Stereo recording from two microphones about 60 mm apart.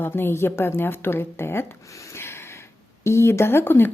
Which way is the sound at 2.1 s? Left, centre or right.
Left.